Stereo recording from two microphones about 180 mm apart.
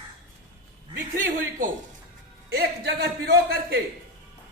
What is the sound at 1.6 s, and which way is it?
Speech, 50° right (ahead or behind).